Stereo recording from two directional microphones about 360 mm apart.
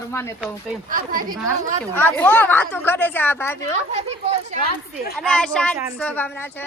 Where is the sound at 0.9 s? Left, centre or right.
Right.